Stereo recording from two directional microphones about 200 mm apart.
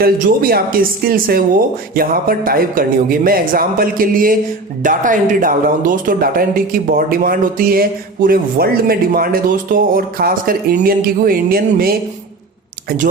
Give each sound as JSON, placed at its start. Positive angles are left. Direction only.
{"t": 0.0, "sound": "speech", "side_deg": -45}